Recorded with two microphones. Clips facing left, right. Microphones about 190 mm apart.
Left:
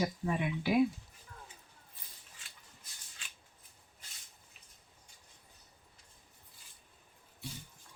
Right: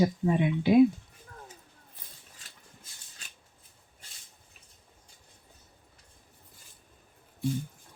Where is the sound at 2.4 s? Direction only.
40° right (ahead or behind).